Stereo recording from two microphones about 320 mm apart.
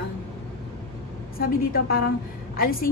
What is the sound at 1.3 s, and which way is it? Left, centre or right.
Speech, left.